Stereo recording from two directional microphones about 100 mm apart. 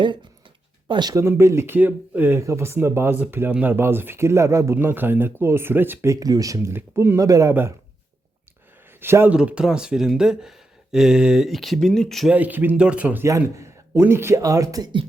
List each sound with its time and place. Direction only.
0.9 s speech: 45° right (ahead or behind)
1.1 s speech: 25° right (ahead or behind)
6.1 s speech: 40° right (ahead or behind)
9.0 s speech: 20° right (ahead or behind)
9.3 s speech: 10° right (ahead or behind)
12.3 s speech: 15° right (ahead or behind)
13.2 s speech: 30° right (ahead or behind)